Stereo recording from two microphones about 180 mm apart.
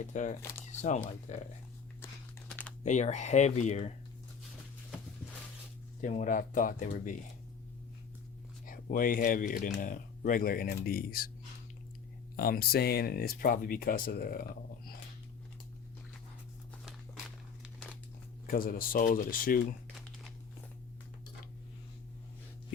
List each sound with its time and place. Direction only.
0.0 s speech: 45° left (ahead or behind)
2.8 s speech: 40° left (ahead or behind)
6.0 s speech: 45° left (ahead or behind)
8.6 s speech: 50° left (ahead or behind)
12.4 s speech: 55° left (ahead or behind)
18.4 s speech: 55° left (ahead or behind)